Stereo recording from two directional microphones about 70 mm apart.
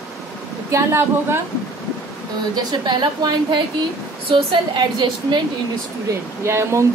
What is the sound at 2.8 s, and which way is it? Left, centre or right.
A woman's voice, right.